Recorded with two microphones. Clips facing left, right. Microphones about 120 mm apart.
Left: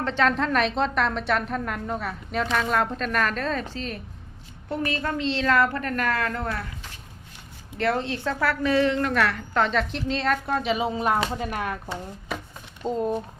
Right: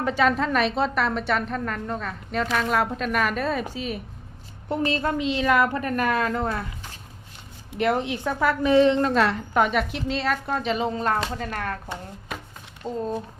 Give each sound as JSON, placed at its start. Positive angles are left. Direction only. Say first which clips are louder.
{"t": 0.0, "sound": "a woman's voice", "louder": "right 1 dB", "side_deg": -10}
{"t": 4.7, "sound": "a woman's voice", "louder": "right 3 dB", "side_deg": -25}
{"t": 5.1, "sound": "a woman's voice", "louder": "left 1 dB", "side_deg": -15}
{"t": 7.8, "sound": "a woman's voice", "louder": "right 2 dB", "side_deg": -15}
{"t": 9.6, "sound": "a woman's voice", "louder": "even", "side_deg": -5}
{"t": 12.8, "sound": "speech", "louder": "left 3 dB", "side_deg": 15}